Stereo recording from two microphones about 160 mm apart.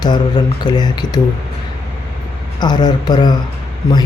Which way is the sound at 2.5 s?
25° left (ahead or behind).